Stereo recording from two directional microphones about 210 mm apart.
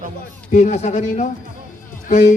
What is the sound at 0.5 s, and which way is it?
Speech, 35° left (ahead or behind).